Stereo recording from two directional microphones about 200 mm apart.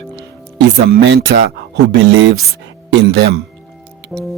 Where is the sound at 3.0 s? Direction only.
60° right (ahead or behind).